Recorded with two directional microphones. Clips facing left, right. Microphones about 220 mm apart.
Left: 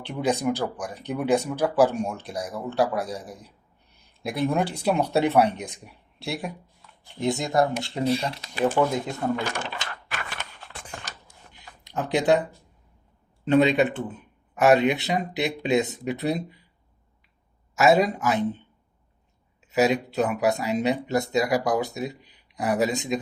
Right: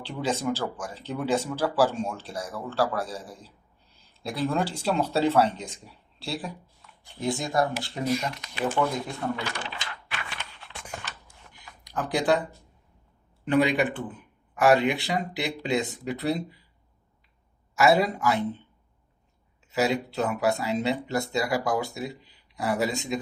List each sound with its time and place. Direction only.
0.0 s speech: 20° left (ahead or behind); by 8.8 s 35° left (ahead or behind)
9.2 s a sound: 45° left (ahead or behind)
11.6 s a sound: 25° left (ahead or behind)
13.4 s speech: 25° left (ahead or behind)
17.7 s speech: 20° left (ahead or behind)
19.7 s speech: 20° left (ahead or behind)